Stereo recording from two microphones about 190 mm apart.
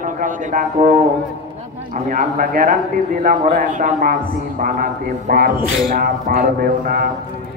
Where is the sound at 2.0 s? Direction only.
45° right (ahead or behind).